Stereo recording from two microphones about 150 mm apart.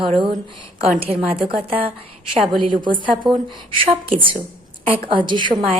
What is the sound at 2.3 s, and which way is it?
Speech, centre (ahead or behind).